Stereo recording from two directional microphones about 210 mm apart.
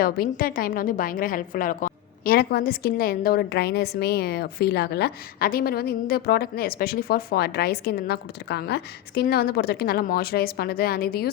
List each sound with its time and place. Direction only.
0.0 s a woman's voice: 45° left (ahead or behind)